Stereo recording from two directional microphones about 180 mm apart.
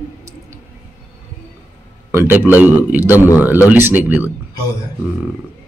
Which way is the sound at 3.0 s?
15° left (ahead or behind).